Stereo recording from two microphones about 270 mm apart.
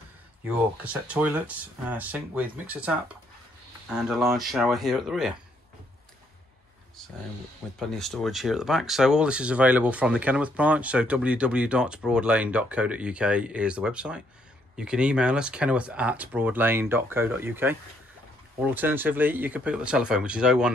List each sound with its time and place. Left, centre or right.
0.8 s speech: centre
7.9 s speech: centre